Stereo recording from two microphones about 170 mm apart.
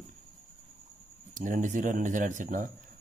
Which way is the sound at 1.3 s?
50° right (ahead or behind).